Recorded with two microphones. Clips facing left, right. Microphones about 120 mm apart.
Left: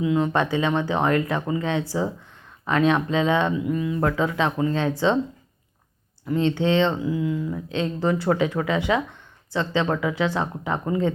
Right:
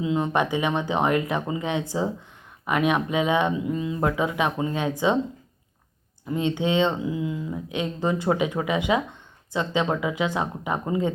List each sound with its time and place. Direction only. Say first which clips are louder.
0.0 s speech: left 2 dB; 20° right (ahead or behind)
6.2 s speech: left 3 dB; 15° right (ahead or behind)